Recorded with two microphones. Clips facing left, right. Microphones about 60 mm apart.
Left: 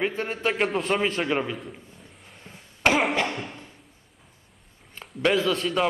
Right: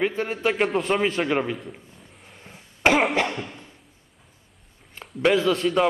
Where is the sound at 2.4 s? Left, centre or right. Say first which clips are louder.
Right 2 dB; centre.